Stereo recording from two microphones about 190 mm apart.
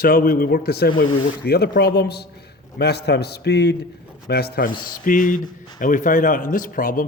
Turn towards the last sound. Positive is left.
turn(degrees=45)  # may be behind; listen again after turning